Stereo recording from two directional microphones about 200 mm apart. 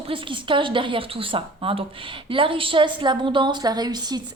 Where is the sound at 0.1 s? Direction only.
25° right (ahead or behind).